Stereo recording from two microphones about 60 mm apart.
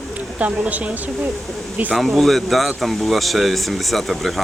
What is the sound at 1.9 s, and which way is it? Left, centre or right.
Speech, centre.